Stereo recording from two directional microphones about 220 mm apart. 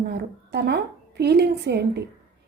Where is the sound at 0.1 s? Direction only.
50° right (ahead or behind).